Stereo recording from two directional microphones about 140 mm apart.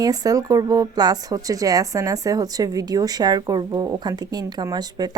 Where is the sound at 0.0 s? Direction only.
25° right (ahead or behind).